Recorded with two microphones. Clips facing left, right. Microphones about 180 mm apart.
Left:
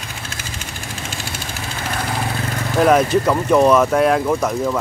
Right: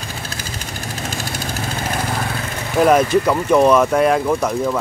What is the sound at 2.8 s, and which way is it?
Speech, centre (ahead or behind).